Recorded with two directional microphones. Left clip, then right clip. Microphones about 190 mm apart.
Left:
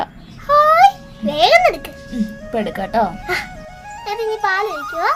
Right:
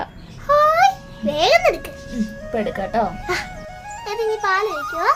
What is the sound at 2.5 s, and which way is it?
Speech, 15° left (ahead or behind).